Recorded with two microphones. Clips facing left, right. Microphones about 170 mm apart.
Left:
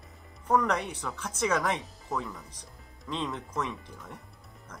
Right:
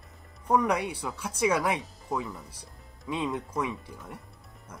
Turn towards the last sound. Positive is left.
turn(degrees=-10)  # may be behind; listen again after turning